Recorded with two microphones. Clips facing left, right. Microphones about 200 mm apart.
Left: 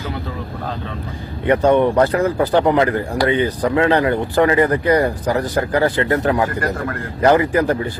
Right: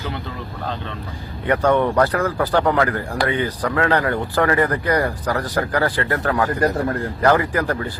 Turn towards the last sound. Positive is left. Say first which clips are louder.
# left 5 dB
turn(degrees=20)  # may be behind; listen again after turning